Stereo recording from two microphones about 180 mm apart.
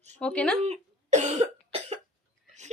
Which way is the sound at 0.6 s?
40° right (ahead or behind).